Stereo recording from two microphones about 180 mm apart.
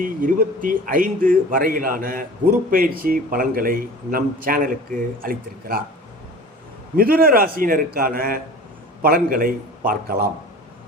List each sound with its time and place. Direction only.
0.0 s speech: 50° right (ahead or behind)
6.9 s speech: 55° right (ahead or behind)